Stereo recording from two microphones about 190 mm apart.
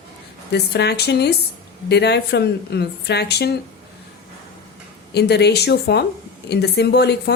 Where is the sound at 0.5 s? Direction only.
60° left (ahead or behind).